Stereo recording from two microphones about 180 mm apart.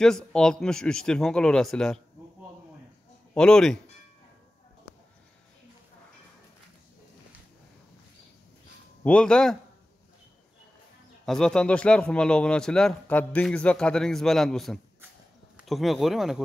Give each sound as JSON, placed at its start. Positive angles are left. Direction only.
{"t": 0.0, "sound": "a man's voice", "side_deg": 5}
{"t": 3.3, "sound": "a man's voice", "side_deg": 5}
{"t": 9.0, "sound": "a man's voice", "side_deg": 5}
{"t": 11.2, "sound": "a man's voice", "side_deg": 5}